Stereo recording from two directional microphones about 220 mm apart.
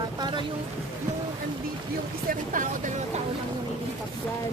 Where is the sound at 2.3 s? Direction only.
35° right (ahead or behind).